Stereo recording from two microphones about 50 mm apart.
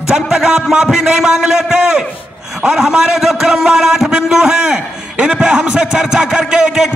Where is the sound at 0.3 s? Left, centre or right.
Centre.